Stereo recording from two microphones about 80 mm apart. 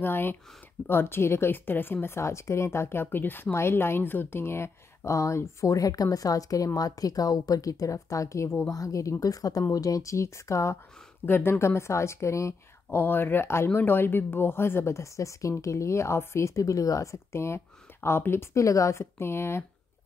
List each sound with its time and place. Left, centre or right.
0.0 s a woman's voice: left
12.9 s a woman's voice: left